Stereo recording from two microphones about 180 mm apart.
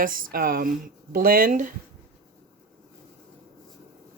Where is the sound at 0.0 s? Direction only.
50° right (ahead or behind).